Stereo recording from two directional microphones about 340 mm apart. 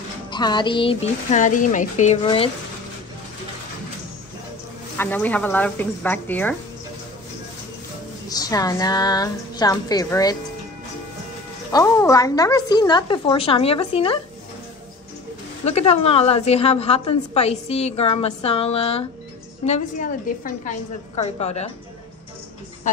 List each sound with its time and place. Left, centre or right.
0.3 s a woman's voice: centre
4.9 s a woman's voice: centre
8.3 s a woman's voice: centre
11.7 s a woman's voice: centre
15.6 s a woman's voice: centre